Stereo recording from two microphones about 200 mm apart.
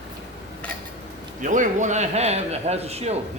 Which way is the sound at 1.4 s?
40° right (ahead or behind).